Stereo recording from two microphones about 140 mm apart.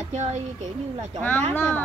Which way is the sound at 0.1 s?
60° right (ahead or behind).